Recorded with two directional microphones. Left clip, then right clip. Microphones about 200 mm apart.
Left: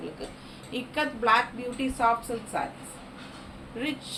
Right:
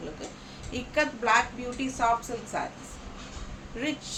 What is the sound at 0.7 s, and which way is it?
Speech, 15° right (ahead or behind).